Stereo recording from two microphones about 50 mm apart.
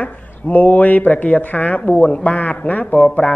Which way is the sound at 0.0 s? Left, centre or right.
Left.